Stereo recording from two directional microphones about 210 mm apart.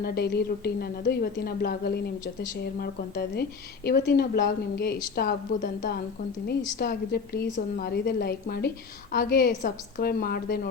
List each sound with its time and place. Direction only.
0.0 s a woman's voice: 50° left (ahead or behind)